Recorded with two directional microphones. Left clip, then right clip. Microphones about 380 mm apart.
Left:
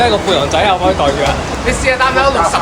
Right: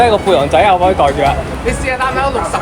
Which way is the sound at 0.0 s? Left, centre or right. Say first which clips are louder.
Right 2 dB; centre.